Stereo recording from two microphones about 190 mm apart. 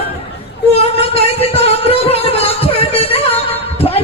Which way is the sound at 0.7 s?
30° left (ahead or behind).